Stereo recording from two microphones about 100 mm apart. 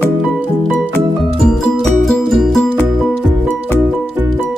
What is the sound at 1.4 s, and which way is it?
Music, centre (ahead or behind).